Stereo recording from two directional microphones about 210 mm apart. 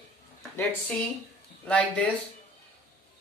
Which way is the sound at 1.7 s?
5° left (ahead or behind).